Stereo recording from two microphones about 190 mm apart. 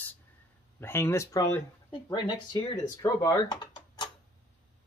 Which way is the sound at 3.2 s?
20° left (ahead or behind).